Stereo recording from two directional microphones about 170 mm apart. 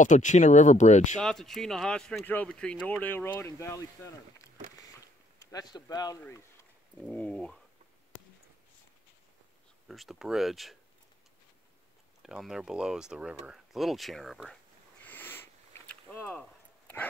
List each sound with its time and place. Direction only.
0.0 s speech: 45° left (ahead or behind)
1.2 s a man's voice: centre (ahead or behind); by 6.1 s 20° left (ahead or behind)
7.0 s speech: 5° left (ahead or behind)
9.8 s speech: centre (ahead or behind)
12.2 s speech: centre (ahead or behind)
15.0 s a sound: 10° left (ahead or behind)